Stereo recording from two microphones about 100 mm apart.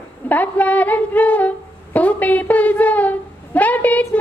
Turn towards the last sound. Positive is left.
turn(degrees=15)  # may be behind; listen again after turning